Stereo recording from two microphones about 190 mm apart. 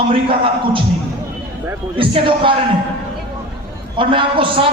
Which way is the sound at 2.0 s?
25° right (ahead or behind).